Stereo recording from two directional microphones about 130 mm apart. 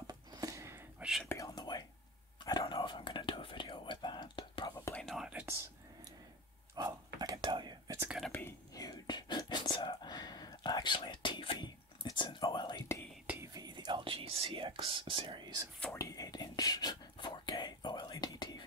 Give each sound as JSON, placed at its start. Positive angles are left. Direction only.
{"t": 0.0, "sound": "whispering", "side_deg": -30}
{"t": 1.3, "sound": "whispering", "side_deg": 30}
{"t": 4.9, "sound": "whispering", "side_deg": 0}
{"t": 6.7, "sound": "whispering", "side_deg": -25}
{"t": 8.3, "sound": "whispering", "side_deg": 15}
{"t": 8.7, "sound": "whispering", "side_deg": 30}
{"t": 13.5, "sound": "whispering", "side_deg": -30}
{"t": 15.8, "sound": "whispering", "side_deg": 20}